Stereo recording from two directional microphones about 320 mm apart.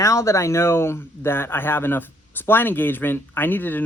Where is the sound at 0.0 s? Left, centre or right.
Centre.